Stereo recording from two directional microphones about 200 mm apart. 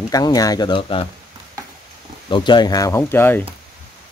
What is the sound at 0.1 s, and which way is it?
Speech, 20° left (ahead or behind).